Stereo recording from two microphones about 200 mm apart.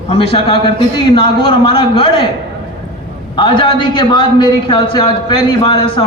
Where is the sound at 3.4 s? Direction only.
25° left (ahead or behind).